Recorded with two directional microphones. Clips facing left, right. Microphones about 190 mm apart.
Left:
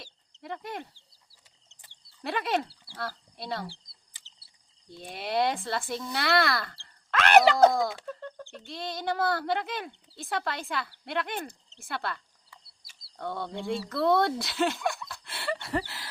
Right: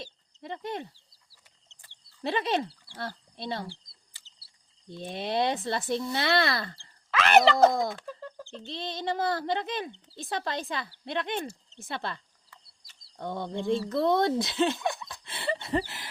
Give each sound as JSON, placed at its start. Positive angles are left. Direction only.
{"t": 2.2, "sound": "speech", "side_deg": -25}
{"t": 3.7, "sound": "bird", "side_deg": 15}
{"t": 4.9, "sound": "speech", "side_deg": -20}
{"t": 7.1, "sound": "speech", "side_deg": 0}
{"t": 8.0, "sound": "bird", "side_deg": -5}
{"t": 8.5, "sound": "speech", "side_deg": -25}